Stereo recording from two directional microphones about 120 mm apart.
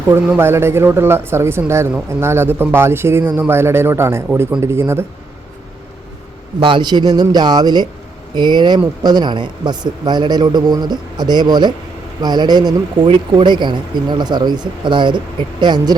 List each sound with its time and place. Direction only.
0.1 s speech: 20° right (ahead or behind)
6.6 s a man's voice: 45° right (ahead or behind)